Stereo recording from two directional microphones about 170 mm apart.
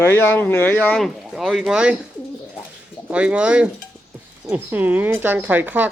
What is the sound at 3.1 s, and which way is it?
Speech, 5° right (ahead or behind).